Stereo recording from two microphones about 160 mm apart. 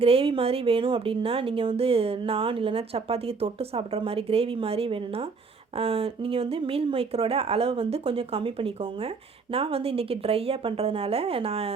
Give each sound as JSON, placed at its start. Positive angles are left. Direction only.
{"t": 0.0, "sound": "speech", "side_deg": -35}